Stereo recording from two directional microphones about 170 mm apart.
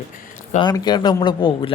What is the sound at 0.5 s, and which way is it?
A man's voice, 25° left (ahead or behind).